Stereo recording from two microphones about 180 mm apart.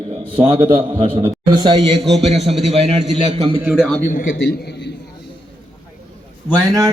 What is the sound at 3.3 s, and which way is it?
Speech, 30° right (ahead or behind).